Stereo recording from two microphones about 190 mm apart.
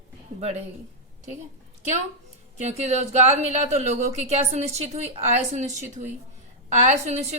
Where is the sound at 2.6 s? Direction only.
35° right (ahead or behind).